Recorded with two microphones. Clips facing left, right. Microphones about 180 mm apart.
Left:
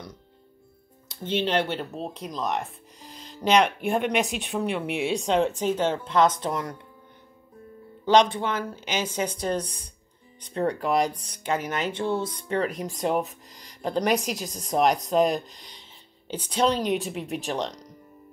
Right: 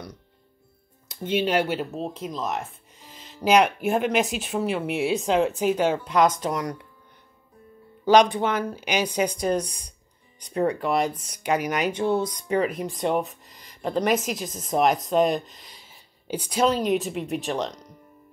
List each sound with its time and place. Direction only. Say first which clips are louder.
1.2 s speech: right 2 dB; 10° right (ahead or behind)
8.1 s speech: right 2 dB; 15° right (ahead or behind)
10.6 s speech: right 1 dB; centre (ahead or behind)
11.3 s speech: right 4 dB; 15° right (ahead or behind)
12.4 s speech: right 2 dB; 5° right (ahead or behind)